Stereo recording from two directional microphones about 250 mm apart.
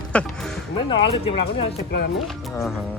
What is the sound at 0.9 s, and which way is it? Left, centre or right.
Speech, left.